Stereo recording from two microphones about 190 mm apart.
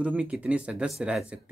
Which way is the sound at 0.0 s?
5° right (ahead or behind).